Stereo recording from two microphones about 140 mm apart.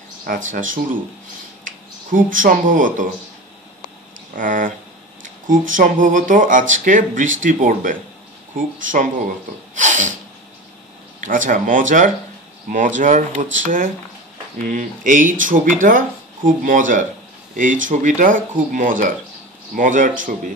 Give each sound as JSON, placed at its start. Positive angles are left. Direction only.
{"t": 0.2, "sound": "speech", "side_deg": -75}
{"t": 4.4, "sound": "speech", "side_deg": -70}
{"t": 9.8, "sound": "a sound", "side_deg": -60}
{"t": 11.1, "sound": "speech", "side_deg": -70}